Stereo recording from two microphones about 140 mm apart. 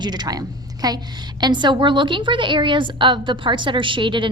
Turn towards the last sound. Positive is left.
turn(degrees=-35)  # may be behind; listen again after turning